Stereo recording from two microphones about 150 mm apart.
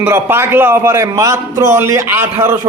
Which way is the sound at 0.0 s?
15° right (ahead or behind).